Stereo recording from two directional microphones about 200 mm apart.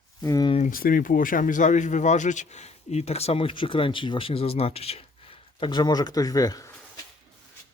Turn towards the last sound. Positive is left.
turn(degrees=15)  # may be behind; listen again after turning